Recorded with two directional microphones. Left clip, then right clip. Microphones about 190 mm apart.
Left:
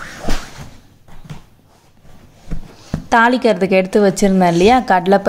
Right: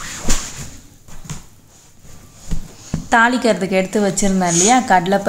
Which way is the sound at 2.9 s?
30° left (ahead or behind).